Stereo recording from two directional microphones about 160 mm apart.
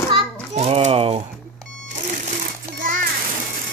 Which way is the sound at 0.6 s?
40° right (ahead or behind).